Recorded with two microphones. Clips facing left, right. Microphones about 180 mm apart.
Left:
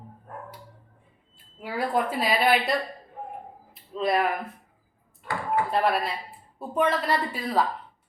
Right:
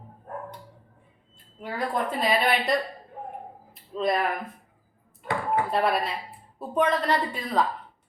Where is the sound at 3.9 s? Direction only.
Centre (ahead or behind).